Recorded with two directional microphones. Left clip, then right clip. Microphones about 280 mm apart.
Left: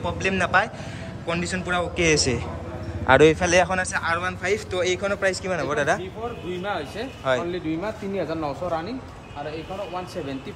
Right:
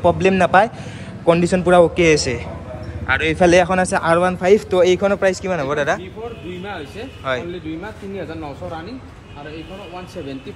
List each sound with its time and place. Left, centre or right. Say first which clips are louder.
0.0 s a man's voice: right 10 dB; centre
3.3 s speech: right 7 dB; centre
7.3 s a man's voice: right 1 dB; centre